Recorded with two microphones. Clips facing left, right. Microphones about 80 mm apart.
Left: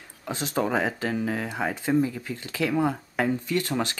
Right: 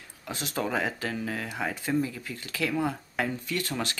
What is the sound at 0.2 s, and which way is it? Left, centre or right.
Speech, left.